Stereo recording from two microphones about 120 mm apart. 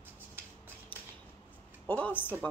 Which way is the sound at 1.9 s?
15° left (ahead or behind).